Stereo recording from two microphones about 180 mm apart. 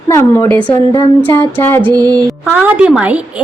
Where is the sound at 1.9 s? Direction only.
20° right (ahead or behind).